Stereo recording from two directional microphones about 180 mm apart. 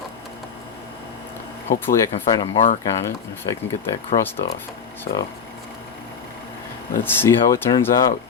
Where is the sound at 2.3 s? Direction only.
25° left (ahead or behind).